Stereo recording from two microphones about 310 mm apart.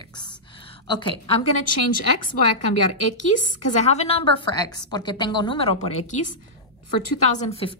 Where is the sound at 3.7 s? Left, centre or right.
Left.